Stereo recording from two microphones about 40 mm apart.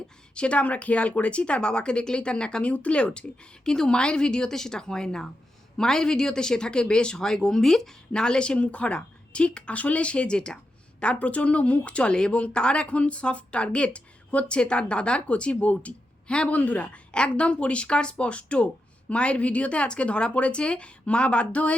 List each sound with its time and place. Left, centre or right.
0.3 s speech: left; by 7.9 s centre
8.1 s speech: left
16.2 s a man's voice: left
16.5 s speech: left
17.1 s speech: left